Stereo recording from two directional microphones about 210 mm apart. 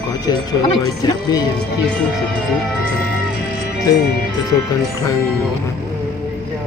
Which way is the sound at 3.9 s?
15° left (ahead or behind).